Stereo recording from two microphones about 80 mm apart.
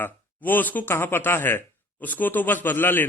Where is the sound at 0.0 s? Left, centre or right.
Left.